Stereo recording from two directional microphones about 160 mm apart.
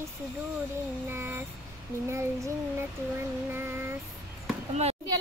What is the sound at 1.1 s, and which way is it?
Child singing, 15° right (ahead or behind).